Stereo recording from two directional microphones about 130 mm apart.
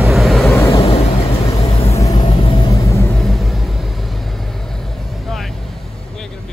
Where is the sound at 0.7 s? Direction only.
50° left (ahead or behind).